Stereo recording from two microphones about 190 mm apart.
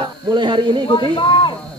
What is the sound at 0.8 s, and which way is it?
Speech, 25° left (ahead or behind).